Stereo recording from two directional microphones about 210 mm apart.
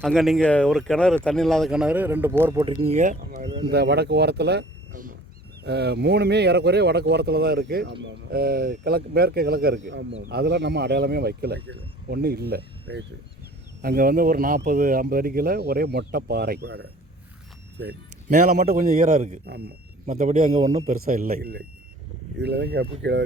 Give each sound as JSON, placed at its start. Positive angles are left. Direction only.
{"t": 0.0, "sound": "speech", "side_deg": 0}
{"t": 2.6, "sound": "a man's voice", "side_deg": -25}
{"t": 3.6, "sound": "speech", "side_deg": -50}
{"t": 4.9, "sound": "wild animals", "side_deg": -40}
{"t": 5.6, "sound": "speech", "side_deg": -55}
{"t": 18.3, "sound": "a man's voice", "side_deg": -35}